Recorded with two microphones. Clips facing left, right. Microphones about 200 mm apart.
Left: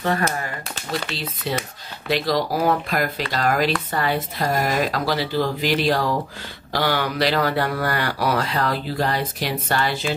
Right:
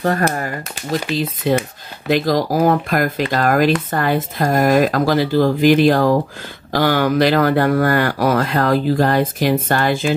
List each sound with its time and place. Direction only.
0.0 s speech: 45° right (ahead or behind)